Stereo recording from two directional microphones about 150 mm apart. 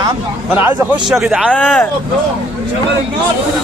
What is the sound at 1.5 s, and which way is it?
Speech, 10° left (ahead or behind).